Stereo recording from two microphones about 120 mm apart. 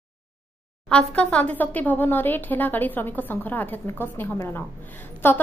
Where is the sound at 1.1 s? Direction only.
10° left (ahead or behind).